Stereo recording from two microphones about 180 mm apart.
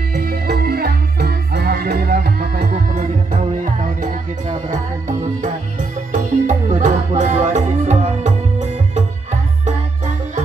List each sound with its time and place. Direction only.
0.1 s music: 60° right (ahead or behind); by 8.3 s 40° right (ahead or behind)